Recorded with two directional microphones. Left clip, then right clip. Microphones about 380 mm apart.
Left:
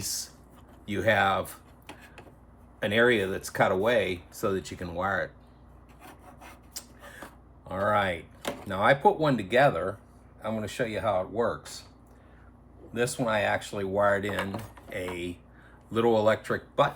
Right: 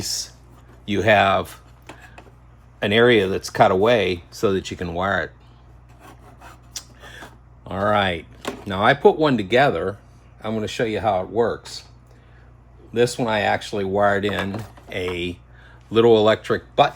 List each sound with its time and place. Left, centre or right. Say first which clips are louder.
0.0 s speech: right 8 dB; right
2.7 s speech: right 8 dB; right
7.7 s speech: right 6 dB; right
12.9 s speech: right 8 dB; right